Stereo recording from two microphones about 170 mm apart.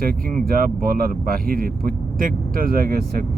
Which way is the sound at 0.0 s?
55° right (ahead or behind).